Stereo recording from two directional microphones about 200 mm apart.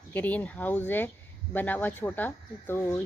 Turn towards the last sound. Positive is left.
turn(degrees=10)  # may be behind; listen again after turning